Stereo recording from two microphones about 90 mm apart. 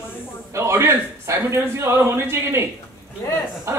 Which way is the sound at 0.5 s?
30° right (ahead or behind).